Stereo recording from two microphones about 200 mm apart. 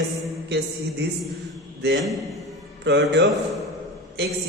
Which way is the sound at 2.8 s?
60° right (ahead or behind).